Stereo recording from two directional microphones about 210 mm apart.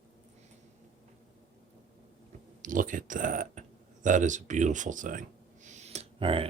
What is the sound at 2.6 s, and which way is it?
Speech, 40° right (ahead or behind).